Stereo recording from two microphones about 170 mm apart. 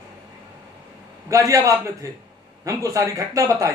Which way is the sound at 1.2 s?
20° right (ahead or behind).